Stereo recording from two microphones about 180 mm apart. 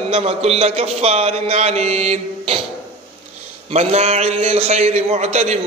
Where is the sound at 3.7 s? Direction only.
35° right (ahead or behind).